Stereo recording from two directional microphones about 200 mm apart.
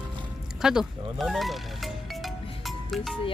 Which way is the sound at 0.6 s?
Centre (ahead or behind).